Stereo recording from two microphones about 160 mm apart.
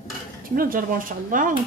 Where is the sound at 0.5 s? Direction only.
60° right (ahead or behind).